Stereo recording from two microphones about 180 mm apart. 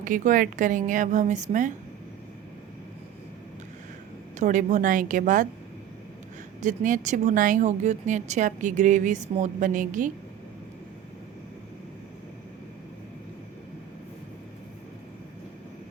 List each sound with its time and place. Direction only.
0.0 s a woman's voice: 45° right (ahead or behind)
4.4 s a woman's voice: 45° right (ahead or behind)
6.6 s a woman's voice: 45° right (ahead or behind)